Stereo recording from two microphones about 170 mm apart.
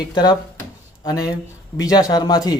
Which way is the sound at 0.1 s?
25° left (ahead or behind).